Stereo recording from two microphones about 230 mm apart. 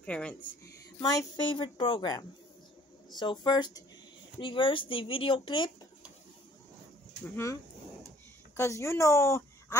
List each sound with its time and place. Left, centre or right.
0.0 s speech: centre
0.4 s speech: centre
8.5 s a woman's voice: centre